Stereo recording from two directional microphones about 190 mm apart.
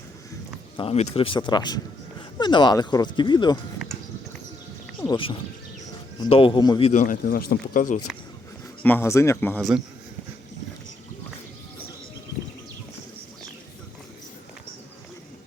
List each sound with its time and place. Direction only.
0.8 s speech: 35° left (ahead or behind)
4.9 s speech: 25° left (ahead or behind)
6.9 s speech: 45° left (ahead or behind)
8.8 s speech: 10° left (ahead or behind)